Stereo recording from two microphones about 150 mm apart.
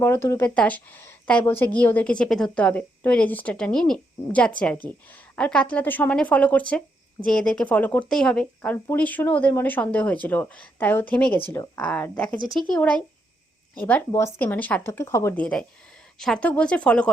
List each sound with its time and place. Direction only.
0.0 s speech: 15° left (ahead or behind)
15.4 s speech: 10° left (ahead or behind)